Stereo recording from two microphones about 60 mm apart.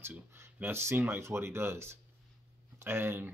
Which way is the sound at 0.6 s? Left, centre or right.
Right.